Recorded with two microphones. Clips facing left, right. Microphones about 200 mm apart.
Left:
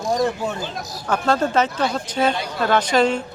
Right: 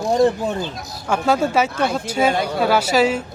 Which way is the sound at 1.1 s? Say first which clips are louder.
Right 1 dB; 10° right (ahead or behind).